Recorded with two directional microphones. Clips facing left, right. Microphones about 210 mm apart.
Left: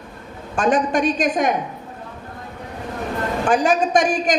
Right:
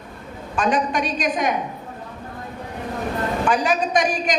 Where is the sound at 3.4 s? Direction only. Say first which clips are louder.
Left 4 dB; 50° left (ahead or behind).